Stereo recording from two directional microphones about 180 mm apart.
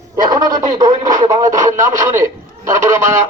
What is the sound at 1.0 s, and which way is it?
Speech, 45° right (ahead or behind).